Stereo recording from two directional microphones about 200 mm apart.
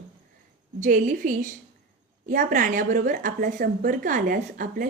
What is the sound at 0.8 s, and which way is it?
A woman's voice, 40° right (ahead or behind).